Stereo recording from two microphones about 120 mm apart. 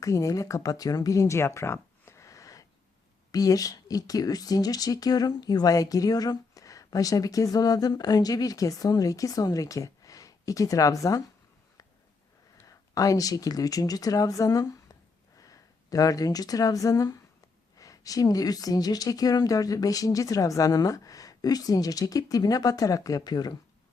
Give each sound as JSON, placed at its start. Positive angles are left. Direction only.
{"t": 0.0, "sound": "speech", "side_deg": 25}
{"t": 12.6, "sound": "a woman's voice", "side_deg": 30}